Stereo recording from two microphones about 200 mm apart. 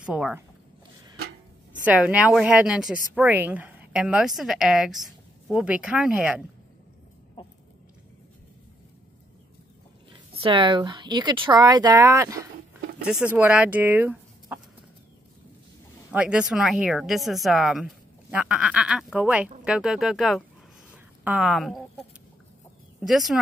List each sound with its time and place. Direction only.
0.0 s a woman's voice: 5° right (ahead or behind)
1.9 s a woman's voice: 5° right (ahead or behind)
7.4 s chicken: 25° left (ahead or behind)
10.3 s speech: 25° right (ahead or behind); by 14.6 s 10° right (ahead or behind)
16.1 s a woman's voice: 5° right (ahead or behind)
20.9 s chicken: 5° right (ahead or behind)
22.9 s speech: centre (ahead or behind)